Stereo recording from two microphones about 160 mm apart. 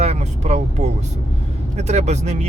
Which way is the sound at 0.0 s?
45° right (ahead or behind).